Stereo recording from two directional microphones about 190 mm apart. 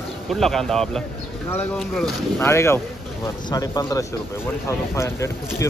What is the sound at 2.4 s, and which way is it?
Speech, 15° left (ahead or behind).